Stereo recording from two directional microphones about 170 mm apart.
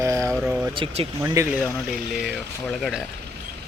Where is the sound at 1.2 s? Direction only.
20° right (ahead or behind).